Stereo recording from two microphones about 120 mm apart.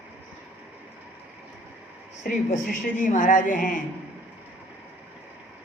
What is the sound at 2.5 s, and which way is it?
Speech, 90° left.